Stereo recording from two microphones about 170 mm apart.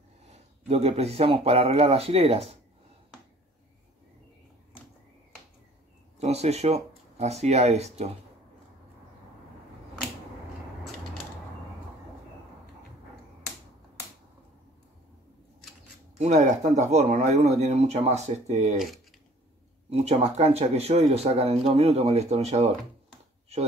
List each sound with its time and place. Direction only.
0.3 s speech: 35° right (ahead or behind)
6.1 s speech: 40° right (ahead or behind)
16.2 s speech: 45° right (ahead or behind)
20.3 s speech: 40° right (ahead or behind)